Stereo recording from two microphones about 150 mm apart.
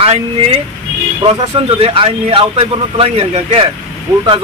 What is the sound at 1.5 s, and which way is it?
Speech, 35° right (ahead or behind).